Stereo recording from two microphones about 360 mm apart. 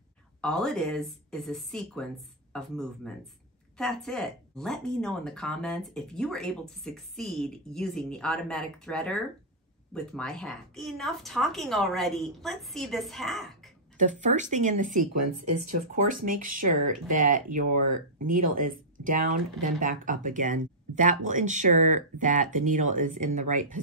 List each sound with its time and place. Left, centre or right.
0.4 s speech: centre
13.9 s speech: centre
16.3 s speech: right